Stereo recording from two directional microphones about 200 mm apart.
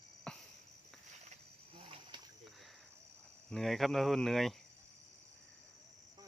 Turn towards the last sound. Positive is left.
turn(degrees=0)  # may be behind; listen again after turning